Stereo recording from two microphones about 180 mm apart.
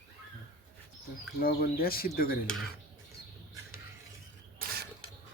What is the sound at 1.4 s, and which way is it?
Speech, 55° left (ahead or behind).